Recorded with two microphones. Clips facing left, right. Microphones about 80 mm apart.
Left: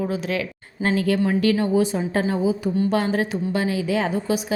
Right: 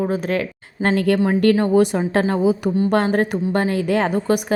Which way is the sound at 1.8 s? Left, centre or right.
Right.